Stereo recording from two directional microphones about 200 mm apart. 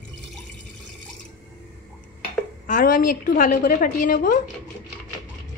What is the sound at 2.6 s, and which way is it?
A woman's voice, 40° left (ahead or behind).